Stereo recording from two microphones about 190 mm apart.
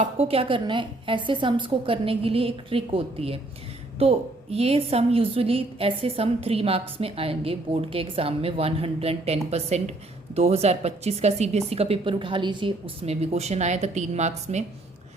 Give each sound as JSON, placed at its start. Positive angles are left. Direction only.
{"t": 0.0, "sound": "a woman's voice", "side_deg": -30}